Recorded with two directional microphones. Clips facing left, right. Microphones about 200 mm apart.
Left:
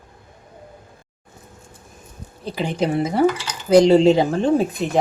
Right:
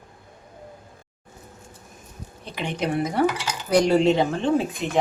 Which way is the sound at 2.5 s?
35° left (ahead or behind).